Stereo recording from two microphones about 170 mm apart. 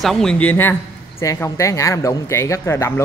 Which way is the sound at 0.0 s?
5° left (ahead or behind).